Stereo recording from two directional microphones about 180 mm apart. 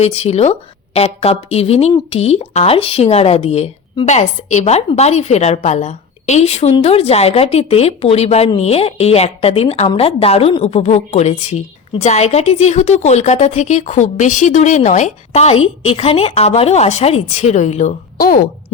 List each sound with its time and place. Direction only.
0.0 s speech: 35° left (ahead or behind)